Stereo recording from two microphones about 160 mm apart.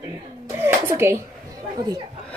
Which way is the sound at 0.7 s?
15° right (ahead or behind).